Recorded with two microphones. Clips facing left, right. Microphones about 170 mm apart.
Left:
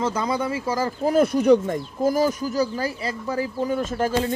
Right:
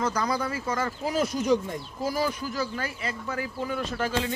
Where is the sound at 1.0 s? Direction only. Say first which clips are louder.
Left 10 dB; 55° left (ahead or behind).